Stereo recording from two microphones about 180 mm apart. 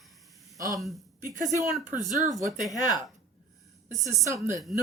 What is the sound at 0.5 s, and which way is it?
Speech, 20° right (ahead or behind).